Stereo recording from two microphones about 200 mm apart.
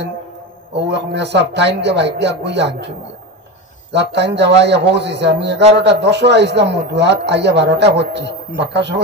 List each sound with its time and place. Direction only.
0.7 s a man's voice: 60° right (ahead or behind)
3.9 s a man's voice: 60° right (ahead or behind)